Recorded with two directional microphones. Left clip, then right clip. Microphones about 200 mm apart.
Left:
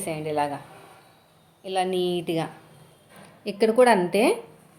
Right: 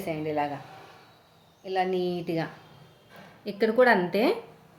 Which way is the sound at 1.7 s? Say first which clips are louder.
Left 3 dB; 25° left (ahead or behind).